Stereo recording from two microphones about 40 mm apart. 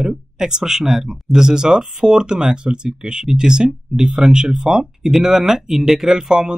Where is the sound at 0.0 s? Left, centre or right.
Centre.